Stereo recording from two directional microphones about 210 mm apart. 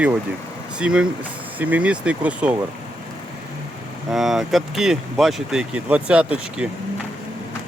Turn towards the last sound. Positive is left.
turn(degrees=-5)  # may be behind; listen again after turning